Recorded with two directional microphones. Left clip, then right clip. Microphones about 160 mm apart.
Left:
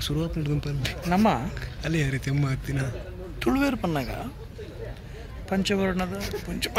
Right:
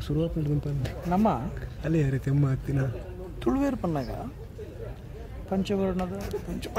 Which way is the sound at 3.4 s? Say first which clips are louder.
Left 2 dB; 10° right (ahead or behind).